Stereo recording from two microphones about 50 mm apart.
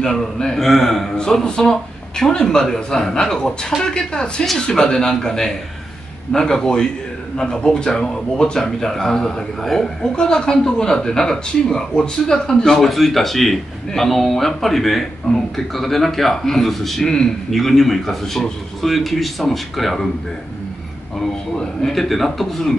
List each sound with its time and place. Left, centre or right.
0.0 s speech: centre
21.5 s speech: centre